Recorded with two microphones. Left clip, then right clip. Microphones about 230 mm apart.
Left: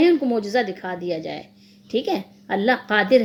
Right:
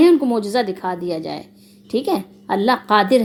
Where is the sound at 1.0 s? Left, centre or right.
Right.